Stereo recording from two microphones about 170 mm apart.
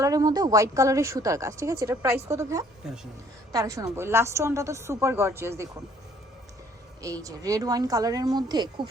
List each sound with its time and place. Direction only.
0.0 s a woman's voice: 20° right (ahead or behind)
7.0 s a woman's voice: 20° right (ahead or behind)